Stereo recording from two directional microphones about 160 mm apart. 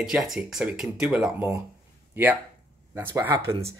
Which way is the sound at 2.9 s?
15° right (ahead or behind).